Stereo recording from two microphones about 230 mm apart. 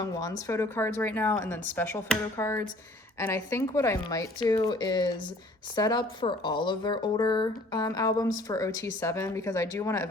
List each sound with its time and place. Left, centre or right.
0.0 s a woman's voice: centre